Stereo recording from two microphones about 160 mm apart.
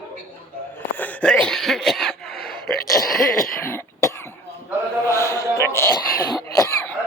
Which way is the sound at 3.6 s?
15° left (ahead or behind).